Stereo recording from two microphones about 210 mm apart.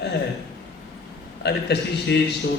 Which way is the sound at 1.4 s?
55° left (ahead or behind).